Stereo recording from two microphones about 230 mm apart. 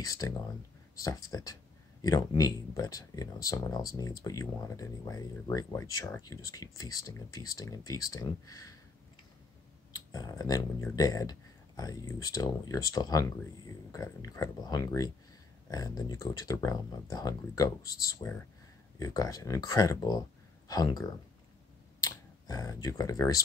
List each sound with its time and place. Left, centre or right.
0.0 s speech: centre
9.9 s speech: centre